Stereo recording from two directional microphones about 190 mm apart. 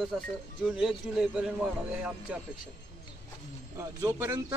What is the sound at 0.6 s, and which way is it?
A man's voice, 5° right (ahead or behind).